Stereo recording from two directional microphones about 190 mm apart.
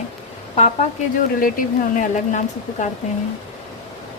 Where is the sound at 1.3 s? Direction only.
45° left (ahead or behind).